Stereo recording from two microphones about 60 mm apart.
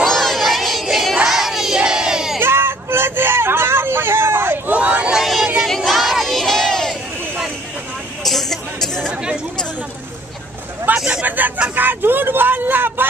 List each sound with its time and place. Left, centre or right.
0.0 s crowd: centre
2.4 s vehicle: right
4.6 s a sound: right
5.1 s vehicle: centre
5.8 s crowd: centre
8.2 s music: centre
9.1 s chatter: centre
11.1 s a sound: right
11.7 s vehicle: right